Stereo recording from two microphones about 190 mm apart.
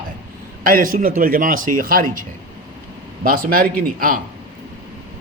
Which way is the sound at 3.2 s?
50° right (ahead or behind).